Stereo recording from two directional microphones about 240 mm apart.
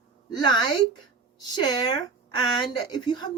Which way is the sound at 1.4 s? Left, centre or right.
Centre.